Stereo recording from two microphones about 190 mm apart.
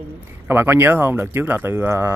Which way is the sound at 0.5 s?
10° right (ahead or behind).